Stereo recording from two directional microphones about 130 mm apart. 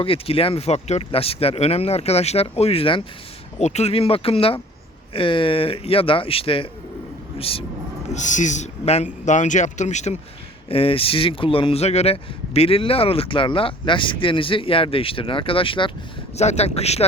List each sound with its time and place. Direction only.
0.0 s speech: 45° left (ahead or behind)
3.6 s speech: 55° left (ahead or behind)
8.1 s speech: 70° left (ahead or behind); by 9.0 s 55° left (ahead or behind)
9.2 s speech: 70° left (ahead or behind)
10.7 s speech: 45° left (ahead or behind)
16.3 s speech: 55° left (ahead or behind)